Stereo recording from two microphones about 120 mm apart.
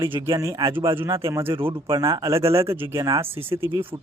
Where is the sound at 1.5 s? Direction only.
45° right (ahead or behind).